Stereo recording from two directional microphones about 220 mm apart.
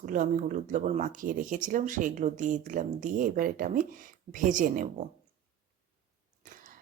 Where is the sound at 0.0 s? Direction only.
35° right (ahead or behind).